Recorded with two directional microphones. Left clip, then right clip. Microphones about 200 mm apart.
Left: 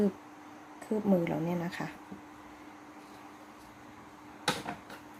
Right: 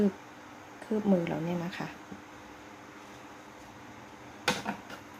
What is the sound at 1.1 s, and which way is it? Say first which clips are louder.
Speech: even; 10° left (ahead or behind).